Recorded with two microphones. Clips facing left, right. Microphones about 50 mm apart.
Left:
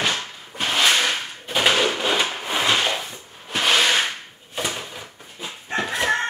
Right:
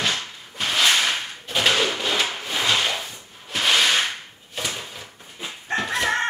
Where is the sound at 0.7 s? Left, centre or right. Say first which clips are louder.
Left 1 dB; centre.